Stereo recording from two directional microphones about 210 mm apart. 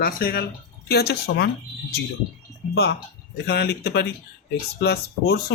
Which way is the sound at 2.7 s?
55° left (ahead or behind).